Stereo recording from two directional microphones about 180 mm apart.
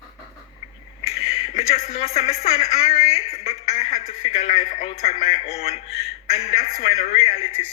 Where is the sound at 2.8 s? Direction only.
35° left (ahead or behind).